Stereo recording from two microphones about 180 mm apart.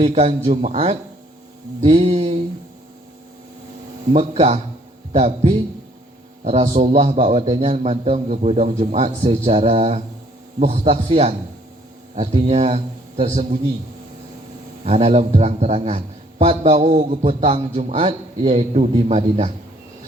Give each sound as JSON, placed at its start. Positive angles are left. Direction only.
{"t": 0.0, "sound": "a man's voice", "side_deg": -35}
{"t": 4.1, "sound": "a man's voice", "side_deg": -35}
{"t": 14.8, "sound": "a man's voice", "side_deg": -35}